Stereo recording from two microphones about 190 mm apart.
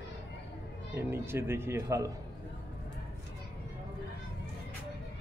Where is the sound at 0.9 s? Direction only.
10° right (ahead or behind).